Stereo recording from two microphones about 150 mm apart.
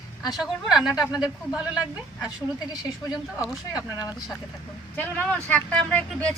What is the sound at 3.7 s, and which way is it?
Speech, 25° left (ahead or behind).